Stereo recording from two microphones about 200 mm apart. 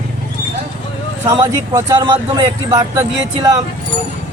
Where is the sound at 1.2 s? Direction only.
20° right (ahead or behind).